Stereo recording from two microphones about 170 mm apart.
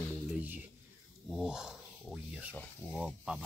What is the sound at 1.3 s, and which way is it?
Speech, 5° right (ahead or behind).